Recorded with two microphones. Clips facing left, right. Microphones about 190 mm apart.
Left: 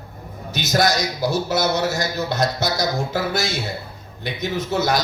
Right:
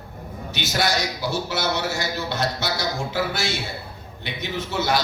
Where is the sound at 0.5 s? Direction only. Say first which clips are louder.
Left 5 dB; 40° left (ahead or behind).